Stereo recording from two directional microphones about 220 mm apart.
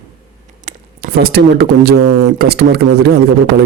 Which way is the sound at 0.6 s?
45° right (ahead or behind).